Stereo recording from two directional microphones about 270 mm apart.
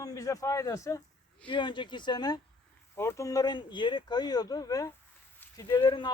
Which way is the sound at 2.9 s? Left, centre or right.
Centre.